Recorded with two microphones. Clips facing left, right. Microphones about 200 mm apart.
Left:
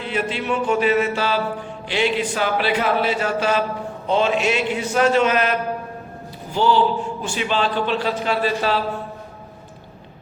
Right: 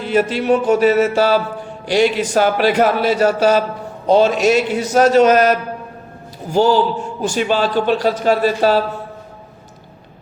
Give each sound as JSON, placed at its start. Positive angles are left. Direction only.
{"t": 0.0, "sound": "a man's voice", "side_deg": -40}